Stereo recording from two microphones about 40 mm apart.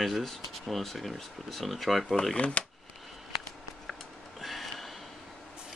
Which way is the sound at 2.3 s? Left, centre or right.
Left.